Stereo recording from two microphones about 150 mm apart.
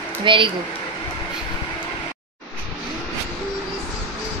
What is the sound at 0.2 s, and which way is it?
Speech, 35° right (ahead or behind).